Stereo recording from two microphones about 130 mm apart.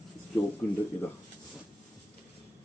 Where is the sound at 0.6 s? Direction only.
10° left (ahead or behind).